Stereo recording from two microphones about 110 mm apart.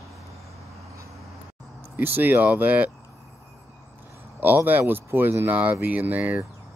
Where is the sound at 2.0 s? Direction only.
20° right (ahead or behind).